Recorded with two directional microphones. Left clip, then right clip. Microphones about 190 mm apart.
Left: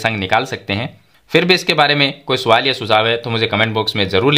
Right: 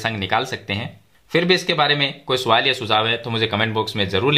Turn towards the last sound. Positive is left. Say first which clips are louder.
# left 5 dB
turn(degrees=25)  # may be behind; listen again after turning